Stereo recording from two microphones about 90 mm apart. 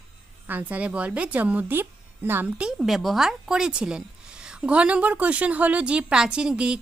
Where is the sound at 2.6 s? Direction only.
5° right (ahead or behind).